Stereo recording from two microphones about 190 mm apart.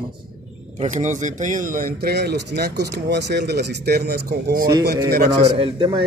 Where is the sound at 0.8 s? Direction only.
40° right (ahead or behind).